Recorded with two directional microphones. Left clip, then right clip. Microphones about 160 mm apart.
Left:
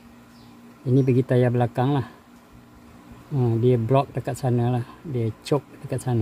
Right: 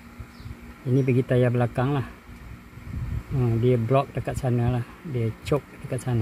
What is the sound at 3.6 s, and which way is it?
Speech, 20° left (ahead or behind).